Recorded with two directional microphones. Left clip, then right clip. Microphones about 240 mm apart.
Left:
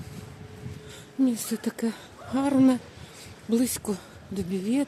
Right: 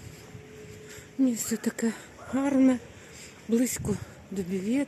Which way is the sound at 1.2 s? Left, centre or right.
Centre.